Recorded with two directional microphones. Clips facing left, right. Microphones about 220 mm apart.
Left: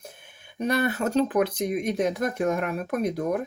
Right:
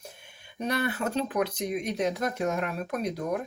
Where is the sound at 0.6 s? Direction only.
50° left (ahead or behind).